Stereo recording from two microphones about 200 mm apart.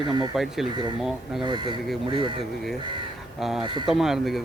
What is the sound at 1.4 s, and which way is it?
Speech, 25° right (ahead or behind).